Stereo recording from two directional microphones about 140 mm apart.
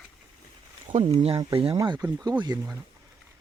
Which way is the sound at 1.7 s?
25° right (ahead or behind).